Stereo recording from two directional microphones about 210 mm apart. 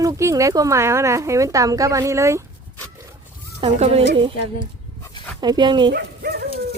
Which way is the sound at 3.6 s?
30° right (ahead or behind).